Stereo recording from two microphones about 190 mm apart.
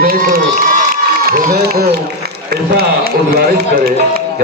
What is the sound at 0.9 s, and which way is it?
Crowd, 50° right (ahead or behind).